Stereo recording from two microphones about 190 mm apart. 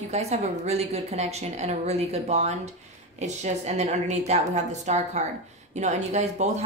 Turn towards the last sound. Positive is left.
turn(degrees=-35)  # may be behind; listen again after turning